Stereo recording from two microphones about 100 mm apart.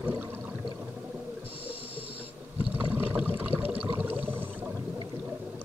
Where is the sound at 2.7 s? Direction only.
15° right (ahead or behind).